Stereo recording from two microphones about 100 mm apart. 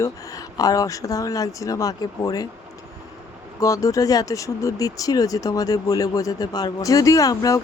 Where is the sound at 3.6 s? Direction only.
35° left (ahead or behind).